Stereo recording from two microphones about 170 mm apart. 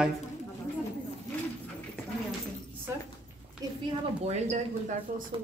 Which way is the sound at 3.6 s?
20° right (ahead or behind).